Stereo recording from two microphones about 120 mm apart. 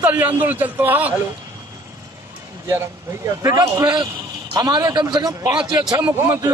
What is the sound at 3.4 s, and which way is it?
A man's voice, 30° right (ahead or behind).